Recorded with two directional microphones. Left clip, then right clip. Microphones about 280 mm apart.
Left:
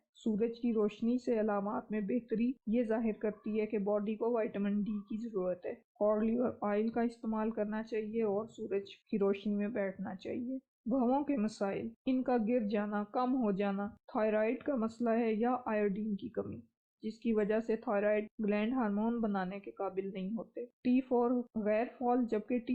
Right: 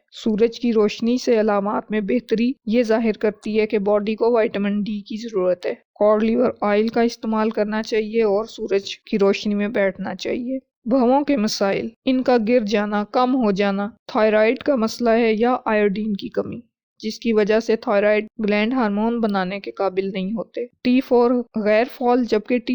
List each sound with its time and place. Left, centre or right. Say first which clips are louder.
0.3 s speech: right 16 dB; right